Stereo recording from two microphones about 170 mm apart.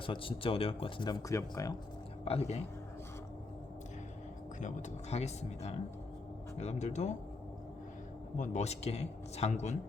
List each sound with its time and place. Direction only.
0.0 s speech: 30° left (ahead or behind)
2.2 s speech: 35° left (ahead or behind)
4.6 s speech: 40° left (ahead or behind)
8.4 s speech: 40° left (ahead or behind)